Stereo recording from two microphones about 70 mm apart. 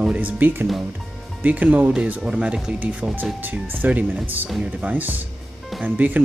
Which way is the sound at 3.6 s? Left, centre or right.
Right.